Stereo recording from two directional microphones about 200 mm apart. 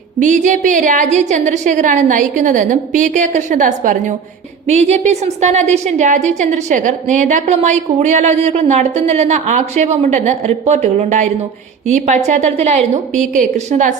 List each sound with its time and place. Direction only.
0.2 s a woman's voice: 40° right (ahead or behind)